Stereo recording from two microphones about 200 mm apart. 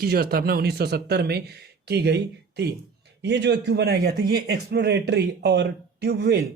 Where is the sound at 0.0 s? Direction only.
50° right (ahead or behind).